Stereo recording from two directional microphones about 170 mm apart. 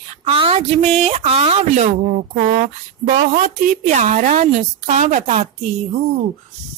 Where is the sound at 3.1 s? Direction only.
45° right (ahead or behind).